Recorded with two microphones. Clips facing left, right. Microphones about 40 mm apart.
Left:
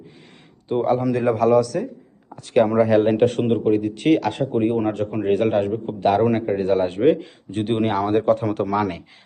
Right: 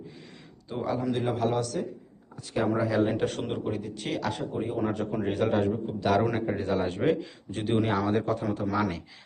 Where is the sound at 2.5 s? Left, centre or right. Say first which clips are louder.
Left 10 dB; left.